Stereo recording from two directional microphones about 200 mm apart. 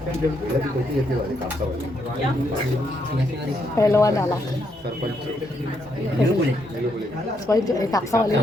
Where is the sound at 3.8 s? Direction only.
15° left (ahead or behind).